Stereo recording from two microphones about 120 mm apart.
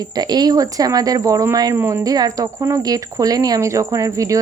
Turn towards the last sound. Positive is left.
turn(degrees=-30)  # may be behind; listen again after turning